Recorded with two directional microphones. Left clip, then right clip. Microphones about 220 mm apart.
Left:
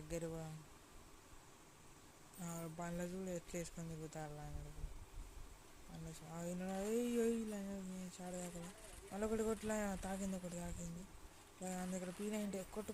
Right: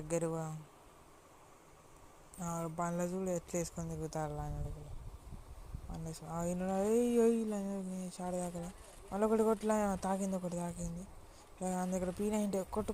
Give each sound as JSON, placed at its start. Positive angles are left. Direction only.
{"t": 0.1, "sound": "speech", "side_deg": -20}
{"t": 2.4, "sound": "speech", "side_deg": -20}
{"t": 6.1, "sound": "speech", "side_deg": -20}
{"t": 8.4, "sound": "speech", "side_deg": 0}
{"t": 9.1, "sound": "speech", "side_deg": -20}
{"t": 12.0, "sound": "speech", "side_deg": 0}
{"t": 12.3, "sound": "speech", "side_deg": -25}